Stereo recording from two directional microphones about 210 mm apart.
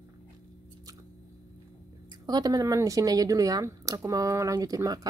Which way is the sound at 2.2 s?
20° right (ahead or behind).